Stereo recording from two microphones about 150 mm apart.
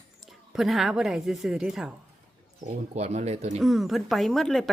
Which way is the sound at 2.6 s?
45° right (ahead or behind).